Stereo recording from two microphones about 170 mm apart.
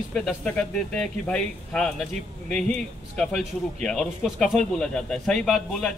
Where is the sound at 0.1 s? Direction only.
5° left (ahead or behind).